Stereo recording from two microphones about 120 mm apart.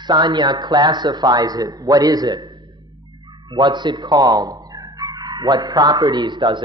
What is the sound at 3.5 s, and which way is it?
A man's voice, 40° right (ahead or behind).